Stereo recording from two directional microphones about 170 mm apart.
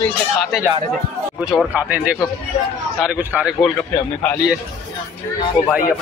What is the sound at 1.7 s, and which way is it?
Speech, 10° right (ahead or behind).